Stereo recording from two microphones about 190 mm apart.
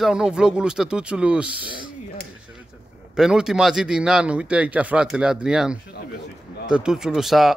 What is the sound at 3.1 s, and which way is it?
Speech, 5° right (ahead or behind).